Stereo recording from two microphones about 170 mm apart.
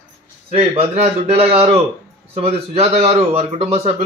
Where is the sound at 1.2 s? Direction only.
35° right (ahead or behind).